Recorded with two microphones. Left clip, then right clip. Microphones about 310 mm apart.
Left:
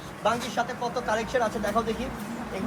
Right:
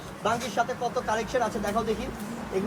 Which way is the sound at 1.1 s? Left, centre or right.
Right.